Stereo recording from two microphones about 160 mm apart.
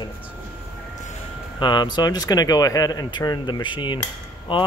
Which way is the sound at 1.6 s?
30° left (ahead or behind).